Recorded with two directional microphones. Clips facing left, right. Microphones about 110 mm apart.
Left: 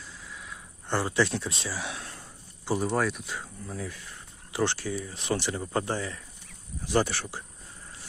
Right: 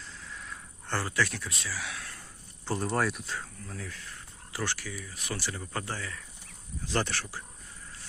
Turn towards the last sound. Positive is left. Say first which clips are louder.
# left 5 dB
turn(degrees=15)  # may be behind; listen again after turning